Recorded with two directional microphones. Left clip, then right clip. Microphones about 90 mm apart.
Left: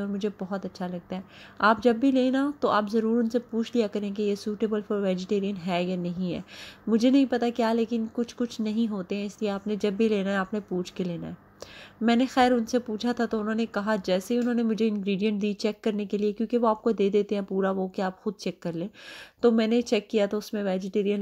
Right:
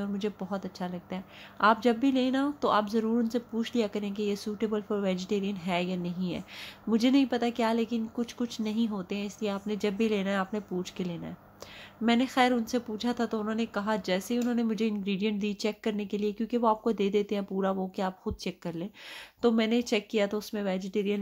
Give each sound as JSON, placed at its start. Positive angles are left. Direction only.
{"t": 0.0, "sound": "a woman's voice", "side_deg": 30}